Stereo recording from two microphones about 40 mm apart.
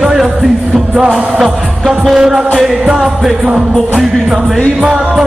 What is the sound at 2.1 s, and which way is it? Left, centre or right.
Music, centre.